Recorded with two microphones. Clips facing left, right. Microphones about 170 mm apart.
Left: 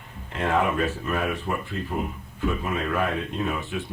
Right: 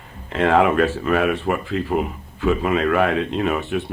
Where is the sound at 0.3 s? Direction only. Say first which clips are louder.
Right 7 dB; 90° right.